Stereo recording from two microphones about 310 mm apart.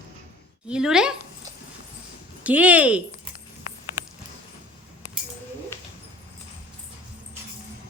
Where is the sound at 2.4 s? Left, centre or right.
Centre.